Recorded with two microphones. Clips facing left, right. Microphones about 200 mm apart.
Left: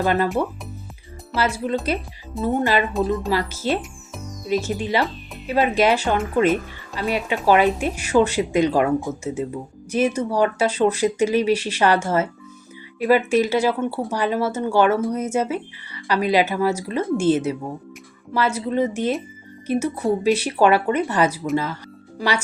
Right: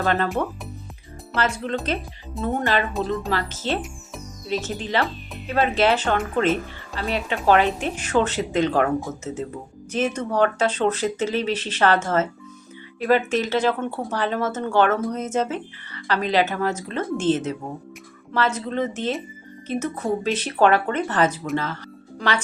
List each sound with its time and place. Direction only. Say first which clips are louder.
0.0 s speech: left 2 dB; 10° left (ahead or behind)
1.3 s speech: left 2 dB; 10° left (ahead or behind)